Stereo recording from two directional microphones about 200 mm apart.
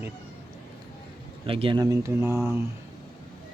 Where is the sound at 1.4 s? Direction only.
25° right (ahead or behind).